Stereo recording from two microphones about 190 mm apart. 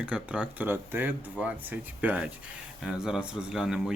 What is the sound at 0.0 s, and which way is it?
Speech, 5° right (ahead or behind).